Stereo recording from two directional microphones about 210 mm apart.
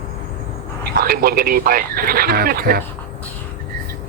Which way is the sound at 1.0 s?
45° right (ahead or behind).